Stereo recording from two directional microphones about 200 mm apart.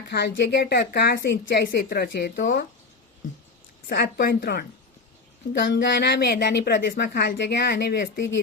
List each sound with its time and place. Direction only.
0.1 s speech: 60° left (ahead or behind)
3.8 s speech: 50° left (ahead or behind)
5.5 s speech: 60° left (ahead or behind)